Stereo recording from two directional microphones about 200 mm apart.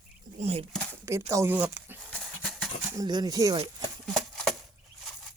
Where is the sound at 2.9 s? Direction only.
20° right (ahead or behind).